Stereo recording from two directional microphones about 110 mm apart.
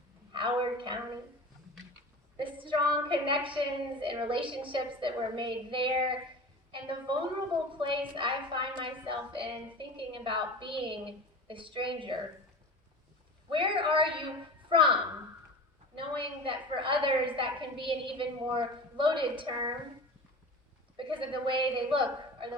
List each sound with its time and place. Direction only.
0.3 s a sound: 50° right (ahead or behind)
2.4 s a woman's voice: 50° right (ahead or behind)
13.5 s a woman's voice: 50° right (ahead or behind)
16.0 s a woman's voice: 50° right (ahead or behind)
20.9 s a woman's voice: 50° right (ahead or behind)